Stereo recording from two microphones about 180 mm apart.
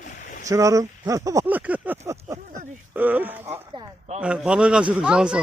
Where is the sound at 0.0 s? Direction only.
45° left (ahead or behind).